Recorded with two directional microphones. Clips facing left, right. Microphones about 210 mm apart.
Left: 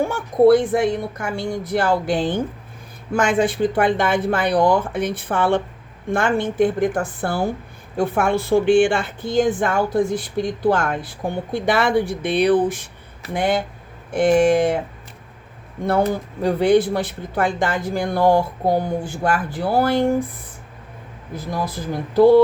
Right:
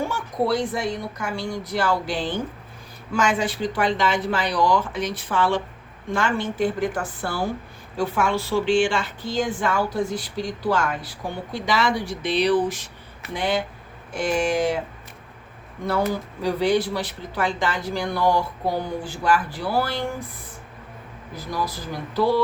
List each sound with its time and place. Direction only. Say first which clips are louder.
0.0 s speech: left 10 dB; 55° left (ahead or behind)
15.9 s speech: left 4 dB; 55° left (ahead or behind)
21.5 s speech: left 3 dB; 55° left (ahead or behind)